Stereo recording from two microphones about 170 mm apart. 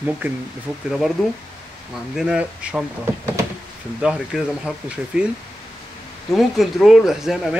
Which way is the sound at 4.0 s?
5° right (ahead or behind).